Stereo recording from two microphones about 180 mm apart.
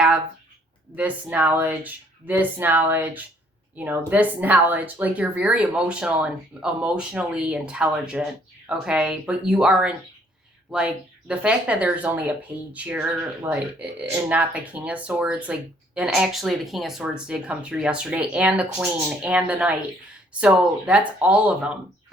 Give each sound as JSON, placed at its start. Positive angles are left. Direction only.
{"t": 0.9, "sound": "speech", "side_deg": -10}